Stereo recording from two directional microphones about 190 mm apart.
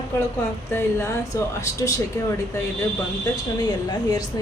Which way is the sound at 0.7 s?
15° left (ahead or behind).